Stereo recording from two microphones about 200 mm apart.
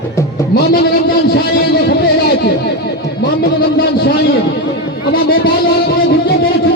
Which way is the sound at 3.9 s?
55° left (ahead or behind).